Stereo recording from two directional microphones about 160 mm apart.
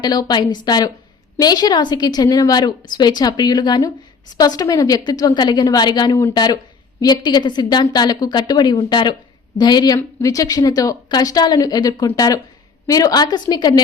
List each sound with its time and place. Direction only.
0.0 s a woman's voice: 25° left (ahead or behind)